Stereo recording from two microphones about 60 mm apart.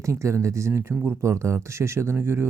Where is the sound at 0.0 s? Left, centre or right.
Right.